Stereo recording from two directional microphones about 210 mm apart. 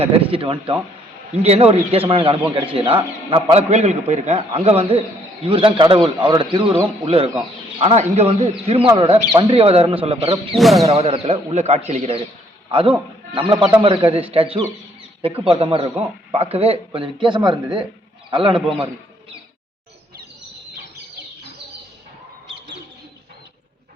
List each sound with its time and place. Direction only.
0.0 s a man's voice: 25° right (ahead or behind)
10.5 s speech: centre (ahead or behind)
10.8 s a man's voice: 30° right (ahead or behind)
13.5 s a man's voice: 25° right (ahead or behind)